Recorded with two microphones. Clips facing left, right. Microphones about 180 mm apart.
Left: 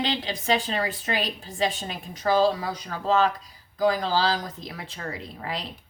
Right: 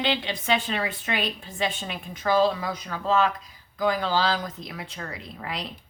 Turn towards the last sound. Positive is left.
turn(degrees=35)  # may be behind; listen again after turning